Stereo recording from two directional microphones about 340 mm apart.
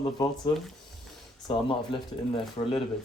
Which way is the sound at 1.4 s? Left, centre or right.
Centre.